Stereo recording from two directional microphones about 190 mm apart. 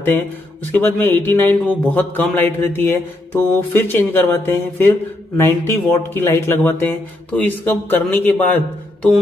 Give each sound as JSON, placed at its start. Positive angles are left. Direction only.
{"t": 0.7, "sound": "speech", "side_deg": 10}